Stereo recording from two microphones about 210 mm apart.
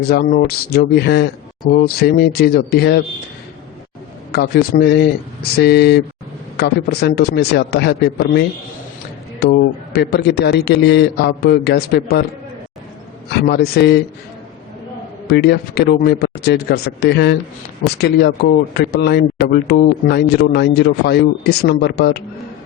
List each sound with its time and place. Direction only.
0.0 s speech: 45° left (ahead or behind)
4.3 s speech: 50° left (ahead or behind)
13.3 s speech: 50° left (ahead or behind)
15.3 s speech: 50° left (ahead or behind)